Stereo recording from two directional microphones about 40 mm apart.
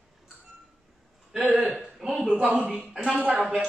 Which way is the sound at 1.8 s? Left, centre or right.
Centre.